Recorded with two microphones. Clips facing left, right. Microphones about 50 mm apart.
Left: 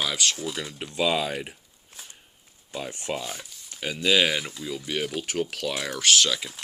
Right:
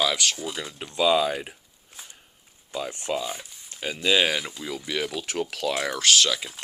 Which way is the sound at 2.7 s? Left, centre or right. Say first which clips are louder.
Right 3 dB; right.